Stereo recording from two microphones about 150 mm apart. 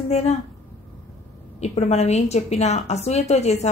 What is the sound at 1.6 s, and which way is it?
A woman's voice, 45° left (ahead or behind).